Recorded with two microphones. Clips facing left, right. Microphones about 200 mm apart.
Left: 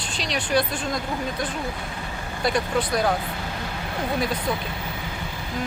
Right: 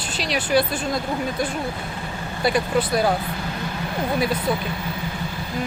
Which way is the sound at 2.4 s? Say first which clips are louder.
Right 3 dB; 5° right (ahead or behind).